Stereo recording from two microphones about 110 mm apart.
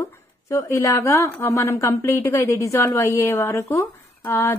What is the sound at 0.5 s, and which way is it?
Speech, 25° left (ahead or behind).